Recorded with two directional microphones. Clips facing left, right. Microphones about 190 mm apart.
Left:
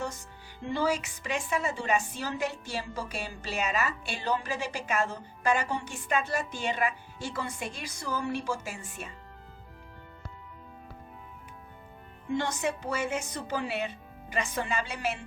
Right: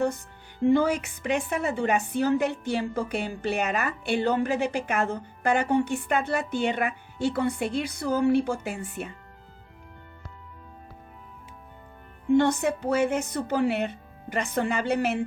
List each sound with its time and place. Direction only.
0.6 s a woman's voice: 55° right (ahead or behind)
12.4 s a woman's voice: 60° right (ahead or behind)